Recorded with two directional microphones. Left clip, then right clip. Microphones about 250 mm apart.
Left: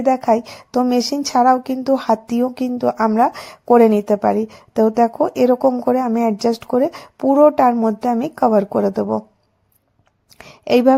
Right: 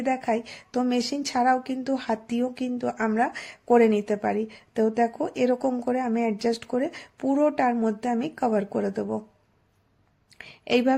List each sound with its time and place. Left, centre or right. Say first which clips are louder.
0.0 s a woman's voice: left 10 dB; left
10.3 s speech: left 8 dB; left